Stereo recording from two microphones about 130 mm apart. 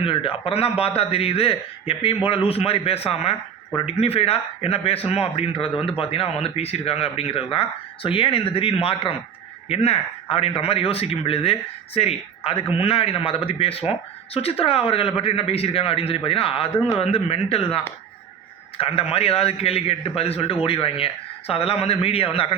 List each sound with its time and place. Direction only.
0.0 s a man's voice: 45° left (ahead or behind)